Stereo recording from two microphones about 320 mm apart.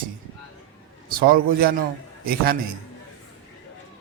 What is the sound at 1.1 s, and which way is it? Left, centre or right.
A man's voice, right.